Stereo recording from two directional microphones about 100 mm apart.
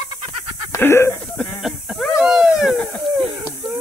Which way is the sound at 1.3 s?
Centre (ahead or behind).